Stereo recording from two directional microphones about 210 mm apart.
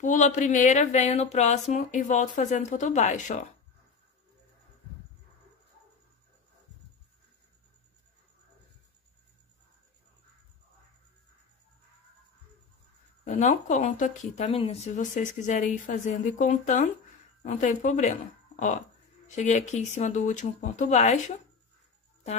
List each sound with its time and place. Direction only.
0.0 s speech: 35° left (ahead or behind)
13.2 s speech: 35° left (ahead or behind)
19.2 s speech: 35° left (ahead or behind)